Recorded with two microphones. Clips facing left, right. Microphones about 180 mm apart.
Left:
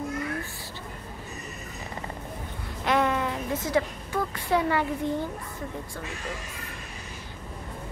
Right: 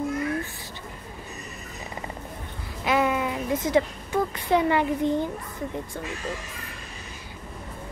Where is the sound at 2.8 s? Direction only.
5° right (ahead or behind).